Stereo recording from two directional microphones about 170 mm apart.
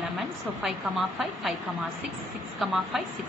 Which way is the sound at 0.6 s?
Centre (ahead or behind).